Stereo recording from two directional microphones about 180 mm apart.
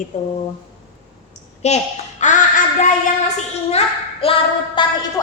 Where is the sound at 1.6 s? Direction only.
40° left (ahead or behind).